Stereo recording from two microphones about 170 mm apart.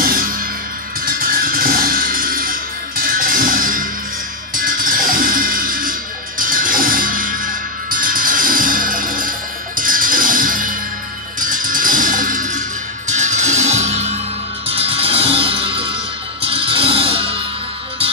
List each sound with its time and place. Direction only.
0.0 s music: 55° right (ahead or behind); by 17.4 s 35° right (ahead or behind)